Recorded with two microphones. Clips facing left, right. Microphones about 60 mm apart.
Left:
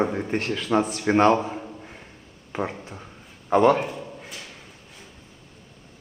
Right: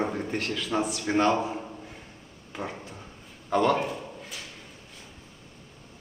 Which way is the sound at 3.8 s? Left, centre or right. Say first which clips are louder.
Left 1 dB; centre.